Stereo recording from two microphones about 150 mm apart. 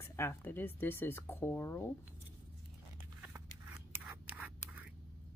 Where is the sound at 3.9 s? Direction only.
10° right (ahead or behind).